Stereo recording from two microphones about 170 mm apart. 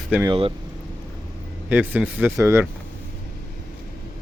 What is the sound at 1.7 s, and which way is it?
Speech, 10° right (ahead or behind).